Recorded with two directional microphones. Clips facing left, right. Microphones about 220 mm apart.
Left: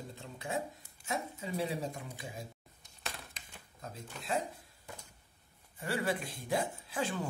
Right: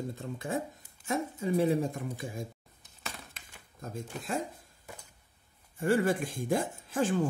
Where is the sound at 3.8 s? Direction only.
50° right (ahead or behind).